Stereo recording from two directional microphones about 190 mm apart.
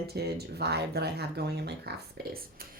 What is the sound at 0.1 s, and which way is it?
A woman's voice, 60° right (ahead or behind).